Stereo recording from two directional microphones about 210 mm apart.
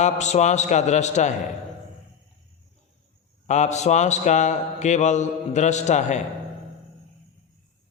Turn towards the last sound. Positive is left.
turn(degrees=35)  # may be behind; listen again after turning